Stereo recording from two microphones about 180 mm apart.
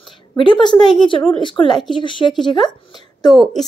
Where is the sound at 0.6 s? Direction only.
25° left (ahead or behind).